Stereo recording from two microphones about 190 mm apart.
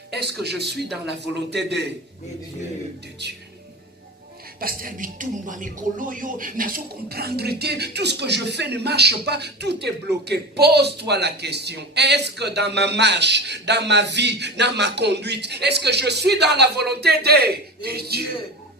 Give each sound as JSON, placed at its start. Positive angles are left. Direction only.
{"t": 0.1, "sound": "a man's voice", "side_deg": -60}
{"t": 3.2, "sound": "a man's voice", "side_deg": -60}
{"t": 4.6, "sound": "a man's voice", "side_deg": -50}